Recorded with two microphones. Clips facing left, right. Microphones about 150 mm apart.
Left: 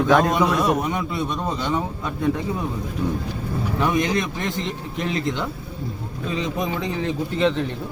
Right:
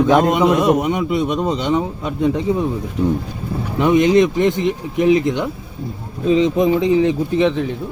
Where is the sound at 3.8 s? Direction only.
20° right (ahead or behind).